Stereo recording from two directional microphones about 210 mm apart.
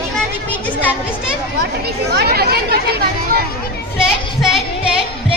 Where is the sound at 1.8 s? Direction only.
50° right (ahead or behind).